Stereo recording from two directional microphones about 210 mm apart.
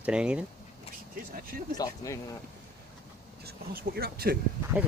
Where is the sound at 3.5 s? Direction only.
45° right (ahead or behind).